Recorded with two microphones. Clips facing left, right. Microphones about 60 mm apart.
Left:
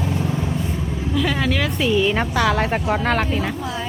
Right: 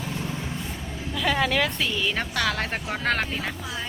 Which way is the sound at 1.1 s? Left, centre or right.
Centre.